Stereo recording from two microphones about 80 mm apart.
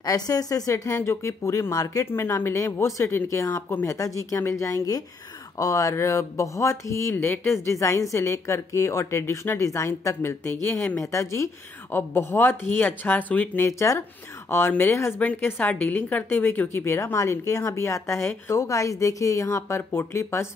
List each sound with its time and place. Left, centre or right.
0.0 s a woman's voice: left
2.0 s a woman's voice: left
7.2 s a woman's voice: left
13.7 s a woman's voice: left
15.1 s a woman's voice: left